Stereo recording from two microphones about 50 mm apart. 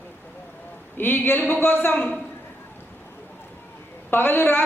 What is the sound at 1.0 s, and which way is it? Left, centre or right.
Speech, left.